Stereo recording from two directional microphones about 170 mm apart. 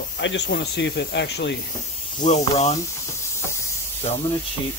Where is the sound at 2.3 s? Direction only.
40° left (ahead or behind).